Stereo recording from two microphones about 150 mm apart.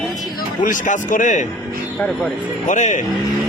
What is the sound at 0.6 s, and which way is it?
Speech, 65° left (ahead or behind).